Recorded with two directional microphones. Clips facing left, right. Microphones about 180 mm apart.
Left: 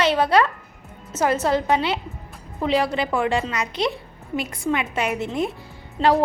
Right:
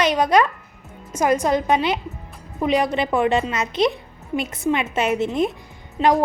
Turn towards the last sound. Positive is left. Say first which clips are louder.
# right 1 dB
turn(degrees=-15)  # may be behind; listen again after turning